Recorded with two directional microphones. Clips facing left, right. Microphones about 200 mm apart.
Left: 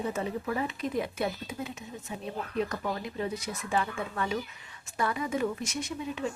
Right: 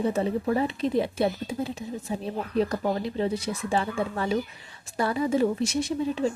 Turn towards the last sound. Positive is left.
turn(degrees=-30)  # may be behind; listen again after turning